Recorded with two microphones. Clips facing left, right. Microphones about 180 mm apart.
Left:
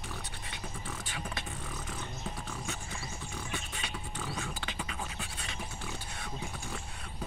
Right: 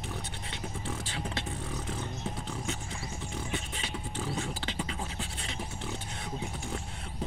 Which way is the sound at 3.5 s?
25° right (ahead or behind).